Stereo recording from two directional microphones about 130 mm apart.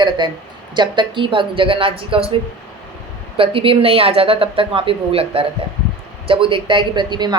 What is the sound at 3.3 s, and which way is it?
Speech, 45° right (ahead or behind).